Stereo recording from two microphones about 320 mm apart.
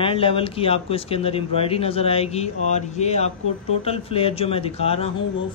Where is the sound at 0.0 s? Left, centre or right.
Centre.